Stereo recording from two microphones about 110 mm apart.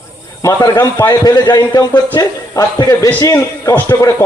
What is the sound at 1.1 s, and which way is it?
A man's voice, 35° left (ahead or behind).